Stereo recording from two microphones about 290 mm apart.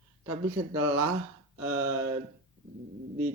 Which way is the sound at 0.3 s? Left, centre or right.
Right.